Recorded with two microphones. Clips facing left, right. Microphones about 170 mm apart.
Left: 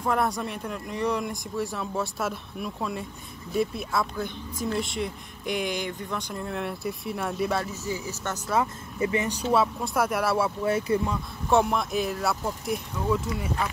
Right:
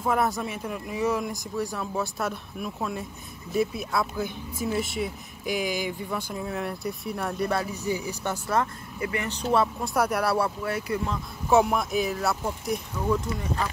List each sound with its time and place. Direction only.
0.0 s speech: centre (ahead or behind)
7.6 s speech: 15° right (ahead or behind)
9.0 s speech: 20° left (ahead or behind)
9.3 s speech: 5° left (ahead or behind)
10.6 s speech: 25° left (ahead or behind)
11.4 s speech: 5° right (ahead or behind)